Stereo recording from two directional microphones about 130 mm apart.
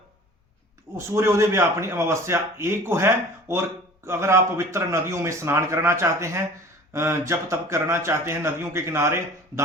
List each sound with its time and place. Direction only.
0.9 s a man's voice: 20° right (ahead or behind)